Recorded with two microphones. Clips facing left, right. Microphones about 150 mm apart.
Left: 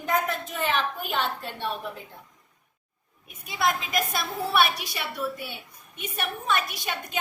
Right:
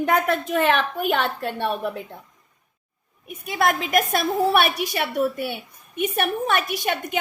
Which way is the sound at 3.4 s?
55° right (ahead or behind).